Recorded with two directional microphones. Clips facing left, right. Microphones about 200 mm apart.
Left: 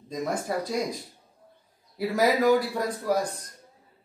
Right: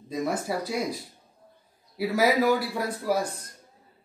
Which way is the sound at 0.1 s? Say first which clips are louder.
Right 1 dB; 5° right (ahead or behind).